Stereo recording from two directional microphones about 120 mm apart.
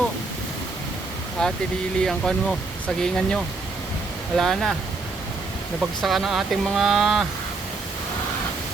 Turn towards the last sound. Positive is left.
turn(degrees=0)  # may be behind; listen again after turning